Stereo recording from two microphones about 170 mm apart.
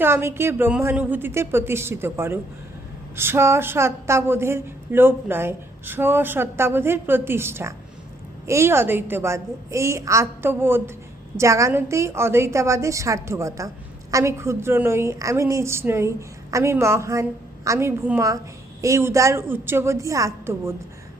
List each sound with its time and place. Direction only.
0.0 s a woman's voice: 15° right (ahead or behind)